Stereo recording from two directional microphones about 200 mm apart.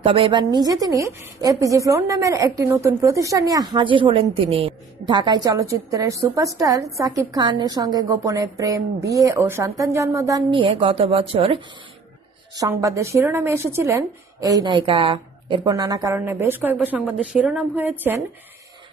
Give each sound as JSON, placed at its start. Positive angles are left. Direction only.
{"t": 0.0, "sound": "a woman's voice", "side_deg": -25}
{"t": 12.5, "sound": "a woman's voice", "side_deg": -15}